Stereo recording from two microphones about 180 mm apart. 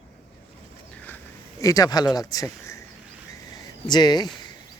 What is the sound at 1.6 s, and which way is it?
Speech, 20° left (ahead or behind).